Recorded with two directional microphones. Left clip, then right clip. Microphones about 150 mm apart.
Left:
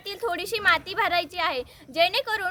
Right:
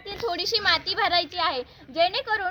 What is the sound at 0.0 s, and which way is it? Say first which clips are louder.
A woman's voice: right 1 dB; 35° left (ahead or behind).